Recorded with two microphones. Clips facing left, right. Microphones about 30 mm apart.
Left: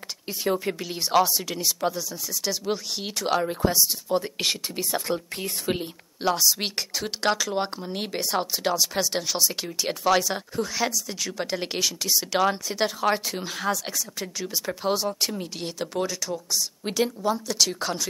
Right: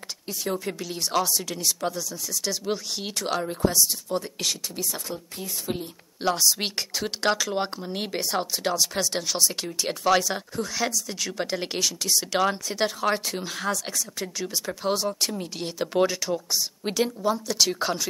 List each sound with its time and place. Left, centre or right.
0.3 s speech: centre
4.4 s speech: left
6.2 s speech: centre
15.9 s speech: centre
16.8 s speech: centre